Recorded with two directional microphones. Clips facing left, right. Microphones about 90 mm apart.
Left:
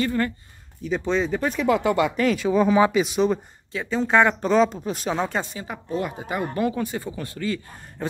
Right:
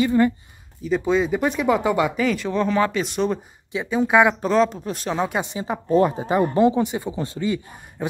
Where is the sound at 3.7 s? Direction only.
10° right (ahead or behind).